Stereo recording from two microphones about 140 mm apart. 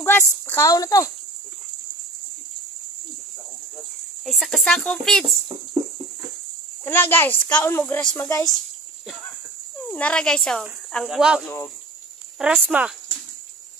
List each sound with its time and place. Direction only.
0.0 s a child's voice: 15° left (ahead or behind)
4.3 s speech: centre (ahead or behind)
6.8 s a child's voice: 15° left (ahead or behind)
8.2 s a child's voice: 20° left (ahead or behind)
9.8 s speech: 10° left (ahead or behind)